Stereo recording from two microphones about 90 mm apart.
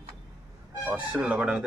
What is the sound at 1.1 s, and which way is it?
Speech, 15° right (ahead or behind).